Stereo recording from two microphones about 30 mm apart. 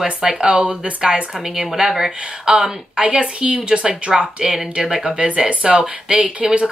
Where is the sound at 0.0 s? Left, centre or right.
Right.